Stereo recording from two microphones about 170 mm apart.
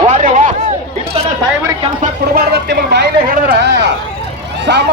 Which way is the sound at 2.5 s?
75° right (ahead or behind).